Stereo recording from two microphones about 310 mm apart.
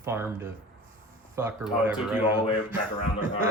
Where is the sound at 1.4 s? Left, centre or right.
Centre.